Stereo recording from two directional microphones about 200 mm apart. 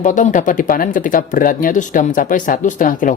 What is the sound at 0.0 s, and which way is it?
Speech, 40° left (ahead or behind).